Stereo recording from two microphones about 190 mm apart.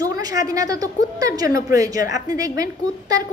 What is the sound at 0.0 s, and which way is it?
A woman's voice, 20° right (ahead or behind).